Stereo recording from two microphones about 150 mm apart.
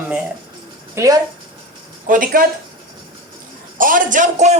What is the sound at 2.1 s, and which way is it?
Speech, 65° right (ahead or behind).